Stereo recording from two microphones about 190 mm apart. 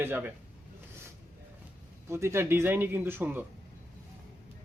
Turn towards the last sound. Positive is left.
turn(degrees=-10)  # may be behind; listen again after turning